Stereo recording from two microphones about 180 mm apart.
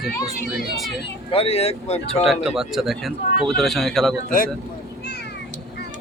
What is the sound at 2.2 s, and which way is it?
A man's voice, 5° right (ahead or behind).